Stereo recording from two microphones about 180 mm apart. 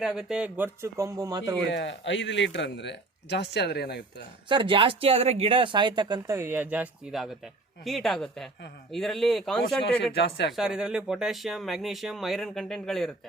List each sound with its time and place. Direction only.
0.0 s speech: centre (ahead or behind); by 1.5 s 20° right (ahead or behind)
1.7 s speech: 80° left
4.4 s speech: 25° right (ahead or behind); by 9.7 s centre (ahead or behind)
10.0 s speech: 70° left (ahead or behind)
10.5 s speech: 5° right (ahead or behind)